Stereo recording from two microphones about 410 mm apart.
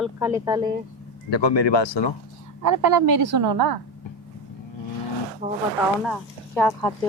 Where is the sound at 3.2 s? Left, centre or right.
Right.